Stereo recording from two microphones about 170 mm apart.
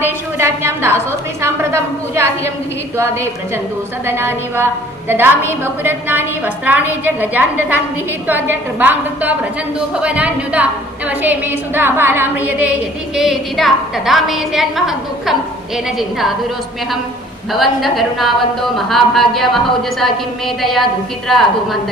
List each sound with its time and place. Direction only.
0.0 s a woman's voice: 15° right (ahead or behind)
13.1 s a woman's voice: centre (ahead or behind)
17.5 s a woman's voice: centre (ahead or behind)
20.6 s a woman's voice: centre (ahead or behind)